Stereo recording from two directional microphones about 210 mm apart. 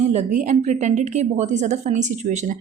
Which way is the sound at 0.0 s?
30° right (ahead or behind).